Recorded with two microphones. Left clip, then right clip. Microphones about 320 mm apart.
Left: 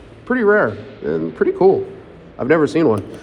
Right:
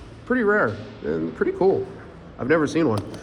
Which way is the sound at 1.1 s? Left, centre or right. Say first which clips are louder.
Left 6 dB; left.